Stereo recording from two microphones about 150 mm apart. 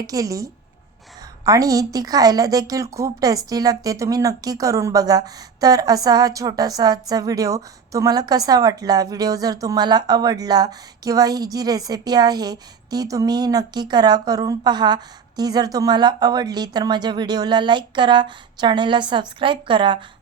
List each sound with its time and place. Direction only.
0.0 s a woman's voice: 25° right (ahead or behind)